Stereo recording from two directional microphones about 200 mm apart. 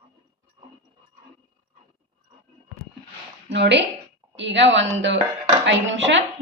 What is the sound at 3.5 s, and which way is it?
A woman's voice, 60° right (ahead or behind).